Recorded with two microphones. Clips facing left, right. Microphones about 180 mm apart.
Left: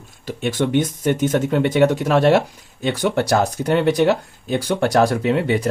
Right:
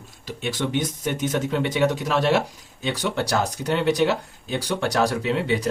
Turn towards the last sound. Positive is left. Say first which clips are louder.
# left 5 dB
turn(degrees=55)  # may be behind; listen again after turning